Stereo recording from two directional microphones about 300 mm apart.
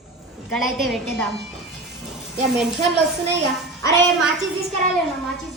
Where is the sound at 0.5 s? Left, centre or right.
Centre.